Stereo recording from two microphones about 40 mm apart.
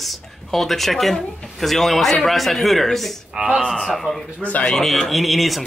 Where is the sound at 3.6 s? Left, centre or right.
Centre.